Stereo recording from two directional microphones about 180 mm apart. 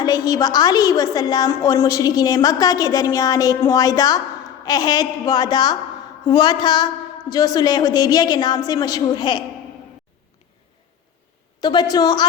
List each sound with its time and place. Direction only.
0.0 s a woman's voice: 20° left (ahead or behind)
11.6 s a woman's voice: 25° left (ahead or behind)